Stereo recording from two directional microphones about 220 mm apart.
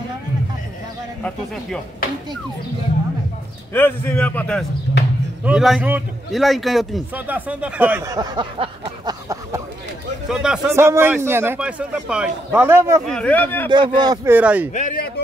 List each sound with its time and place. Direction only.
1.2 s speech: 5° left (ahead or behind)
3.7 s a man's voice: 10° left (ahead or behind)
4.9 s speech: 55° left (ahead or behind)
5.4 s a man's voice: 5° right (ahead or behind)
10.2 s a man's voice: 5° right (ahead or behind)
13.0 s a man's voice: 5° left (ahead or behind)
13.7 s a man's voice: 20° right (ahead or behind)
14.7 s speech: 35° left (ahead or behind)